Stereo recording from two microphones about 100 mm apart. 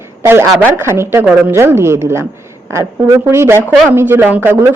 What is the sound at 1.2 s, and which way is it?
Speech, 10° right (ahead or behind).